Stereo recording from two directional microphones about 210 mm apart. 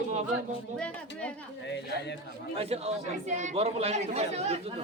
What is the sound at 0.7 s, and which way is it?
Speech, 5° left (ahead or behind).